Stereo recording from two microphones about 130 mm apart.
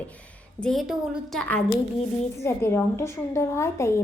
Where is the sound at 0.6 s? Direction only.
Centre (ahead or behind).